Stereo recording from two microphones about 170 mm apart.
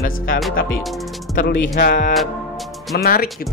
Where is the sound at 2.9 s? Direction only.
65° left (ahead or behind).